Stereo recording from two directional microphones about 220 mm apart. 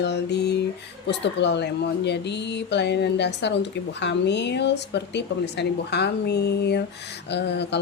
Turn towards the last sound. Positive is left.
turn(degrees=50)  # may be behind; listen again after turning